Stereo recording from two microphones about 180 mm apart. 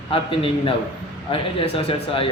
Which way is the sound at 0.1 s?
30° left (ahead or behind).